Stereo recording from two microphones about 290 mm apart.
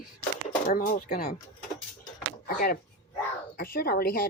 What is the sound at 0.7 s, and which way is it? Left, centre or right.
Speech, left.